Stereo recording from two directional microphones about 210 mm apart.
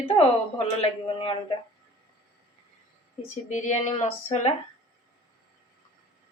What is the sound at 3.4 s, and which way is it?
Speech, 35° left (ahead or behind).